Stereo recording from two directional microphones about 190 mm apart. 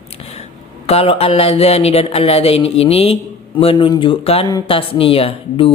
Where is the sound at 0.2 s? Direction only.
30° left (ahead or behind).